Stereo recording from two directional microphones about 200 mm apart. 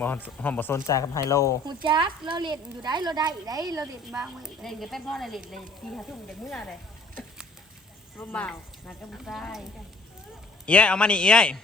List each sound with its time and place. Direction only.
0.4 s speech: 10° left (ahead or behind)
1.6 s speech: 25° right (ahead or behind)
3.8 s speech: 5° right (ahead or behind)
8.2 s speech: 10° left (ahead or behind)
10.7 s speech: 5° left (ahead or behind)